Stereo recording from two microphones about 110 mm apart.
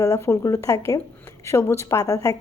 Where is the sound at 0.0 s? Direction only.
25° left (ahead or behind).